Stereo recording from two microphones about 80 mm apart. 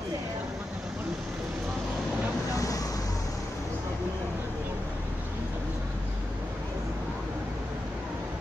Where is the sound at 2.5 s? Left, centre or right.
Left.